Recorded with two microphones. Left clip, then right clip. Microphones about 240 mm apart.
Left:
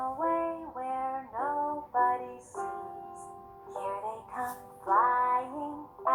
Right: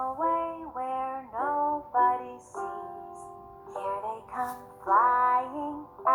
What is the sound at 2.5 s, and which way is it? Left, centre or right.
Music, right.